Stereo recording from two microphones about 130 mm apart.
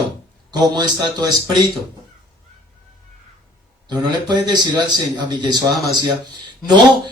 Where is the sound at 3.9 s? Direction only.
35° right (ahead or behind).